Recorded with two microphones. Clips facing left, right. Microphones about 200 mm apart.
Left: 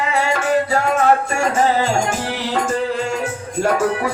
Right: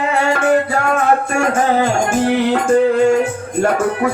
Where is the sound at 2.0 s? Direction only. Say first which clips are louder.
Right 7 dB; 55° right (ahead or behind).